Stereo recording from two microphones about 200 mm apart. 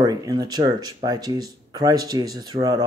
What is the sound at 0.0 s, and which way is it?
Speech, 20° right (ahead or behind).